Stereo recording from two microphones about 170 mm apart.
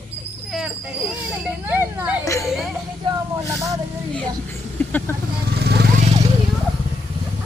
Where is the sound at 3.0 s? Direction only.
30° right (ahead or behind).